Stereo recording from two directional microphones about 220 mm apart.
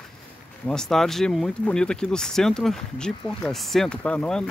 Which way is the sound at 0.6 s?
5° left (ahead or behind).